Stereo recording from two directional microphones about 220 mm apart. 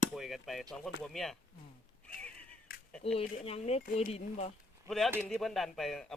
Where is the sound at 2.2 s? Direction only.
5° left (ahead or behind).